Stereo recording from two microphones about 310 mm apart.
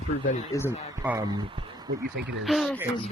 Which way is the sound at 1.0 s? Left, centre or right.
Centre.